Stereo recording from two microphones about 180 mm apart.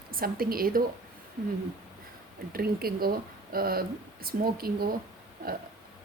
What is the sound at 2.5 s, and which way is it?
Speech, 55° right (ahead or behind).